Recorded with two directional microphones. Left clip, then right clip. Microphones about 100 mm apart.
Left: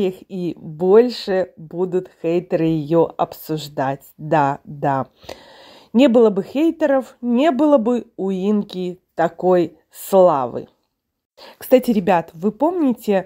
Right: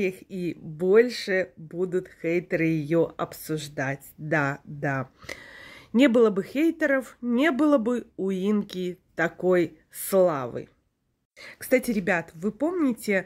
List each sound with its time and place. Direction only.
0.0 s speech: 20° left (ahead or behind)
3.5 s speech: 25° left (ahead or behind)
5.2 s a sound: 15° left (ahead or behind)
5.9 s speech: 15° left (ahead or behind)
11.3 s speech: 35° left (ahead or behind)